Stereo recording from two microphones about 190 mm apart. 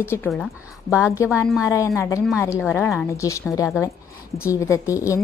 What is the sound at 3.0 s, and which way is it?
A woman's voice, 15° left (ahead or behind).